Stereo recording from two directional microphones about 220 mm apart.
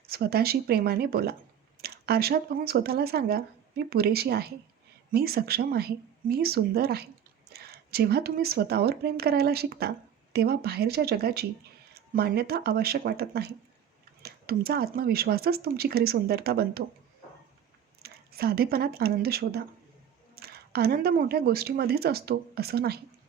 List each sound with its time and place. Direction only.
0.1 s speech: 45° right (ahead or behind)
18.0 s speech: 45° right (ahead or behind)